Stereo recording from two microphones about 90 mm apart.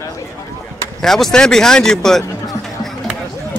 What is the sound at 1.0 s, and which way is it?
Speech, 5° left (ahead or behind).